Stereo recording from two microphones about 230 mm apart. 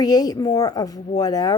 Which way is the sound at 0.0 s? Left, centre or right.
Centre.